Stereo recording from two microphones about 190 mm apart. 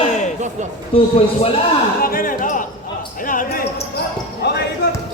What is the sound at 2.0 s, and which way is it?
Speech, 50° left (ahead or behind).